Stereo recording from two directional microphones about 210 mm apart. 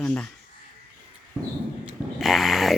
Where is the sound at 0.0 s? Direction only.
5° left (ahead or behind).